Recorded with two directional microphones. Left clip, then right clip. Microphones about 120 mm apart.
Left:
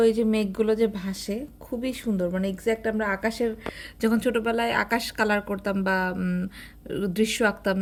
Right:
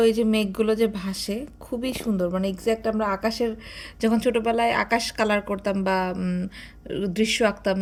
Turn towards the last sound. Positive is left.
turn(degrees=25)  # may be behind; listen again after turning